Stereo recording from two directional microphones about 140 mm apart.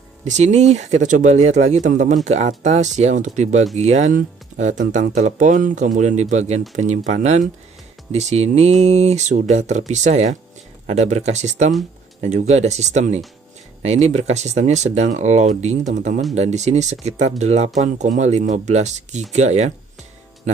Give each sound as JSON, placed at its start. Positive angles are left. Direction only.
{"t": 0.2, "sound": "speech", "side_deg": -55}